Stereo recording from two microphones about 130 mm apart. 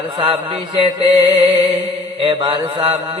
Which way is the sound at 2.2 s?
40° right (ahead or behind).